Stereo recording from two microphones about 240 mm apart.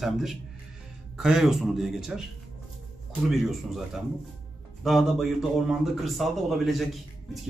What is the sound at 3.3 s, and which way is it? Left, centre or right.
A man's voice, centre.